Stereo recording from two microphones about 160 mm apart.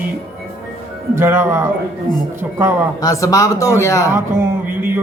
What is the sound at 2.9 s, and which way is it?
Speech, 20° left (ahead or behind).